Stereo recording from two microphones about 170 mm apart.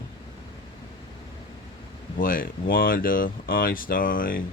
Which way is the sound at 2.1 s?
55° left (ahead or behind).